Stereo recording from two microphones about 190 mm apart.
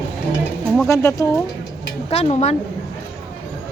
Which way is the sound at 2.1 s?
35° left (ahead or behind).